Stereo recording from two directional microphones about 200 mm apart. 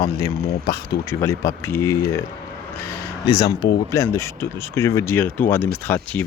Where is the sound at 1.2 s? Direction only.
15° left (ahead or behind).